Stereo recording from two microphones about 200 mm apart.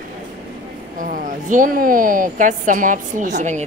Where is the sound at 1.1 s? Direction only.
40° right (ahead or behind).